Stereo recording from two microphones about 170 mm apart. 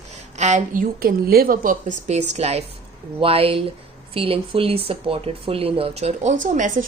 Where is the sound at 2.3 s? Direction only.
40° right (ahead or behind).